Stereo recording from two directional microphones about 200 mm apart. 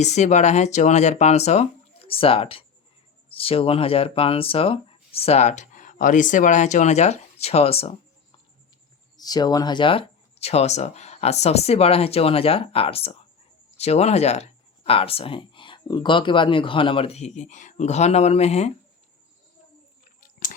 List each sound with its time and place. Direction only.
0.0 s speech: 35° left (ahead or behind)
9.1 s speech: 20° left (ahead or behind)